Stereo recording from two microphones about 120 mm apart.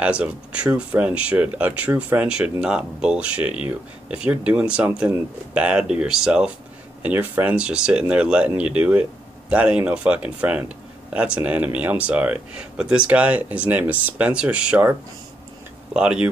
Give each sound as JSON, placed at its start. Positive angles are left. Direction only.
{"t": 0.0, "sound": "speech", "side_deg": -10}